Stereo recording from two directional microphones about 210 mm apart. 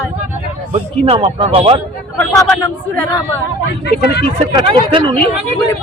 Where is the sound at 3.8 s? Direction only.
50° left (ahead or behind).